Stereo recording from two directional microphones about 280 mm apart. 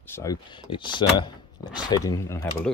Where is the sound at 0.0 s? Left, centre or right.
Centre.